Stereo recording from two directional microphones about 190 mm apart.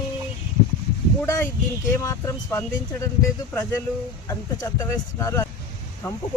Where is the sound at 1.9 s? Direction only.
15° left (ahead or behind).